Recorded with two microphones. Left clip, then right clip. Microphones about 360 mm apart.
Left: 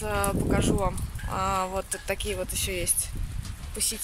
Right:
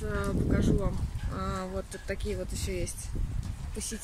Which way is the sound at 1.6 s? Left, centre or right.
Left.